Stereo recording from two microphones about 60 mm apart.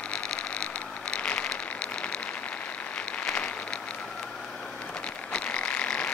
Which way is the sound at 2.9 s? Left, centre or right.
Left.